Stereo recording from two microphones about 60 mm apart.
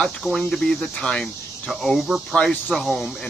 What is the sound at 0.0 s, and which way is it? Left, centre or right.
Speech, centre.